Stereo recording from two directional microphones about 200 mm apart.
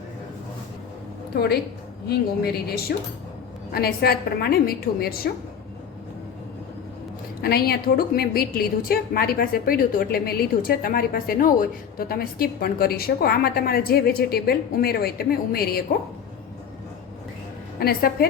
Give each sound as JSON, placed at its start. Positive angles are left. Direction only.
{"t": 1.3, "sound": "a woman's voice", "side_deg": 55}
{"t": 7.4, "sound": "a woman's voice", "side_deg": 50}
{"t": 17.7, "sound": "a woman's voice", "side_deg": 50}